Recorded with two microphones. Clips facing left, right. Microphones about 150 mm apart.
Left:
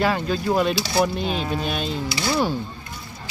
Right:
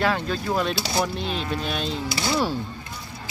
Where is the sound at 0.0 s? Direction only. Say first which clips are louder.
Left 2 dB; 5° left (ahead or behind).